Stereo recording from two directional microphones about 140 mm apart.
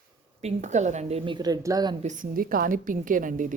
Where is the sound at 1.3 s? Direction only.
25° right (ahead or behind).